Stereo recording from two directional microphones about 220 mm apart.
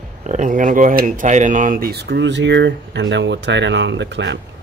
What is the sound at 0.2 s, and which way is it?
Speech, 35° right (ahead or behind).